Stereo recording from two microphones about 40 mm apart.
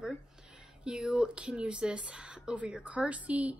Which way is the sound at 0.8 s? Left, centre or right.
Centre.